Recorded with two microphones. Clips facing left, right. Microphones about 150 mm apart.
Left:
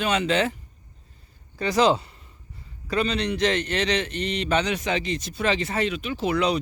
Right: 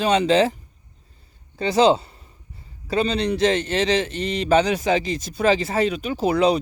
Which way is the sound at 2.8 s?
30° right (ahead or behind).